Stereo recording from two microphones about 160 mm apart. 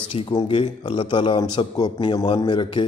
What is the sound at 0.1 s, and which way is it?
A man's voice, 30° left (ahead or behind).